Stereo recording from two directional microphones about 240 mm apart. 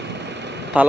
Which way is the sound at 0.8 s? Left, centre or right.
Centre.